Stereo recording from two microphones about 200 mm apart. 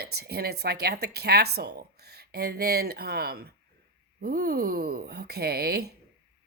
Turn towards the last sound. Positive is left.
turn(degrees=-55)  # may be behind; listen again after turning